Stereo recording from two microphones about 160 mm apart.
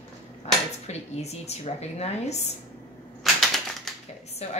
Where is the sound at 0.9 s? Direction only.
40° left (ahead or behind).